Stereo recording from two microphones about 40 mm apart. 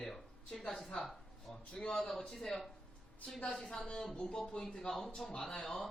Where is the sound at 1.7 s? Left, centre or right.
Left.